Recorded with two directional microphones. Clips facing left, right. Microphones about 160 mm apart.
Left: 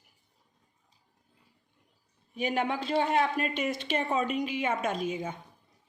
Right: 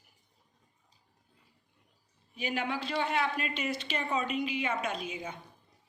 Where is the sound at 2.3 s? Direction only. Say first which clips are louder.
Left 4 dB; 45° left (ahead or behind).